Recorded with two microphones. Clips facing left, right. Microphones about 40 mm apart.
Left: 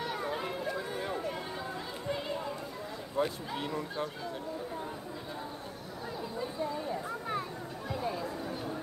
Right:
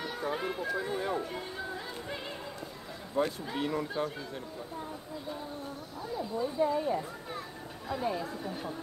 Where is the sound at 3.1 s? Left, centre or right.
Centre.